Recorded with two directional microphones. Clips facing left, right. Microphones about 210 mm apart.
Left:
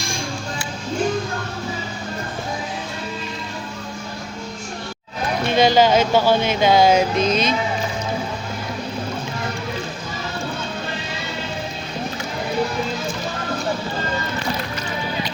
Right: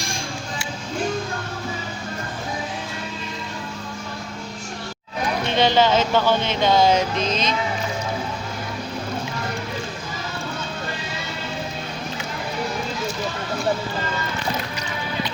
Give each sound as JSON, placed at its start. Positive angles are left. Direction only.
{"t": 5.5, "sound": "speech", "side_deg": 10}